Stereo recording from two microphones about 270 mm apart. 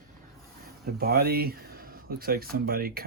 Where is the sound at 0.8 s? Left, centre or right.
Right.